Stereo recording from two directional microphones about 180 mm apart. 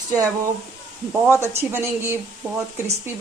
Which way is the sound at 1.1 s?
15° right (ahead or behind).